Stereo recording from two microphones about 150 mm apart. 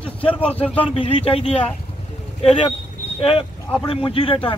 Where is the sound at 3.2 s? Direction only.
40° left (ahead or behind).